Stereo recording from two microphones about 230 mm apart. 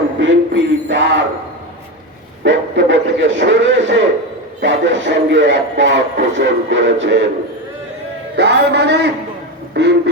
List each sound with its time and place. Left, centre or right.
0.2 s speech: right
2.4 s speech: right
8.4 s speech: right